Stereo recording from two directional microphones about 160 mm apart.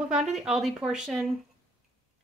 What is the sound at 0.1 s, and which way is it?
Speech, 5° right (ahead or behind).